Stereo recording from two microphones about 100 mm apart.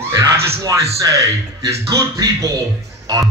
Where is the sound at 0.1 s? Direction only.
35° right (ahead or behind).